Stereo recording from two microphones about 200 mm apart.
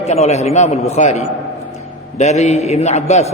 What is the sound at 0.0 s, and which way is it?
A man's voice, 35° left (ahead or behind).